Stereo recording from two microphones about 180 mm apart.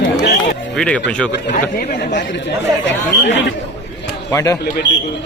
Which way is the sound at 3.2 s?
90° left.